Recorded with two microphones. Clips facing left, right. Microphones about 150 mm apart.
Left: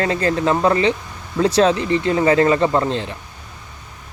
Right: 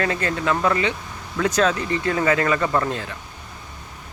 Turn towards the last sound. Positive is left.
turn(degrees=25)  # may be behind; listen again after turning